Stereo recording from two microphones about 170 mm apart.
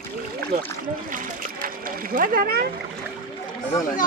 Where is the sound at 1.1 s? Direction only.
55° right (ahead or behind).